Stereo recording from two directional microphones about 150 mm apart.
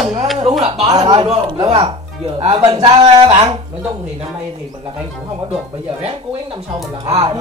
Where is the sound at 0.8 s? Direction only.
30° right (ahead or behind).